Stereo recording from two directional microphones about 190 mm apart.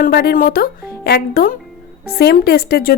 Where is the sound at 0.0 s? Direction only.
55° left (ahead or behind).